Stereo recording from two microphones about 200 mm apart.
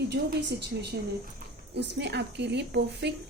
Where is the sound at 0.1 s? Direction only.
55° right (ahead or behind).